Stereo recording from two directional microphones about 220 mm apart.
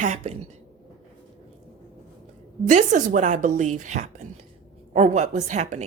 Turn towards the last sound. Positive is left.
turn(degrees=-35)  # may be behind; listen again after turning